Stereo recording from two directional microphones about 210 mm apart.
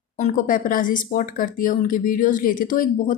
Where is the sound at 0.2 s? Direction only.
40° left (ahead or behind).